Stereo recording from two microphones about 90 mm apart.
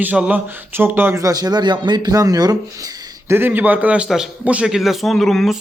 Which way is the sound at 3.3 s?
25° right (ahead or behind).